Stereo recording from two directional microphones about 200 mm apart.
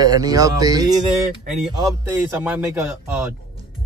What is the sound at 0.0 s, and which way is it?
Speech, 20° right (ahead or behind).